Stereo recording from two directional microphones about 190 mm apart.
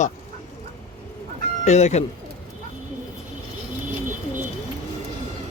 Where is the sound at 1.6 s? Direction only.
35° left (ahead or behind).